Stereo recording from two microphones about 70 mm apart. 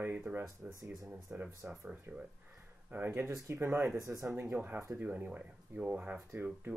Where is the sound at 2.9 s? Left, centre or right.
Right.